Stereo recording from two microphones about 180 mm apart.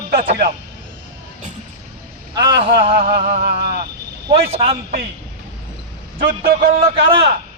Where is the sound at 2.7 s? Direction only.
60° right (ahead or behind); by 3.6 s 45° right (ahead or behind).